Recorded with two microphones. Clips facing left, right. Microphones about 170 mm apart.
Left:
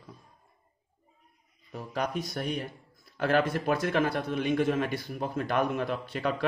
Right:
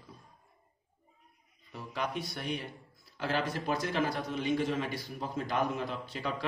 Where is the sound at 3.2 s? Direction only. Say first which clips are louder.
Left 7 dB; 55° left (ahead or behind).